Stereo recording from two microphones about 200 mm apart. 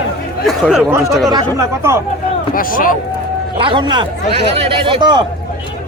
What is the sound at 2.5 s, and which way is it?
Speech, 45° left (ahead or behind).